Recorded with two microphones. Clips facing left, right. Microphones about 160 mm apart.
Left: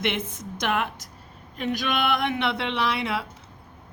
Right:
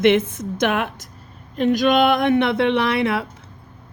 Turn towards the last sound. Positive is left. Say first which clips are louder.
# right 7 dB
turn(degrees=-55)  # may be behind; listen again after turning